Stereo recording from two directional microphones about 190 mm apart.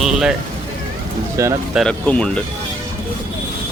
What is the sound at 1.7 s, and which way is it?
Speech, 5° left (ahead or behind).